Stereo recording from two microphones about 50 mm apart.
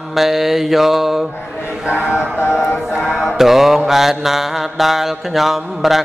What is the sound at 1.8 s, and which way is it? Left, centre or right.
Mantra, right.